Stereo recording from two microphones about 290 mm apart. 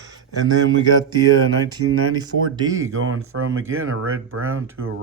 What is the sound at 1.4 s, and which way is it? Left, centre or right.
Speech, right.